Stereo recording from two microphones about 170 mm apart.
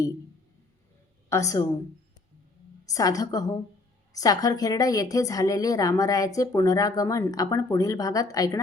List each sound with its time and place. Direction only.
1.3 s a woman's voice: 20° left (ahead or behind)
2.9 s a woman's voice: 20° left (ahead or behind)